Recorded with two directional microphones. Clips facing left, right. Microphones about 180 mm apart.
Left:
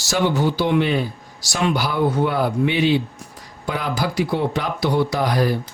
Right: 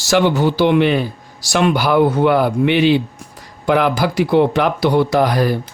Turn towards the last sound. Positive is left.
turn(degrees=-60)  # may be behind; listen again after turning